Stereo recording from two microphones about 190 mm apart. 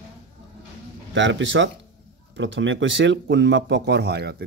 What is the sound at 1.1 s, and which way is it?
Speech, 75° right (ahead or behind).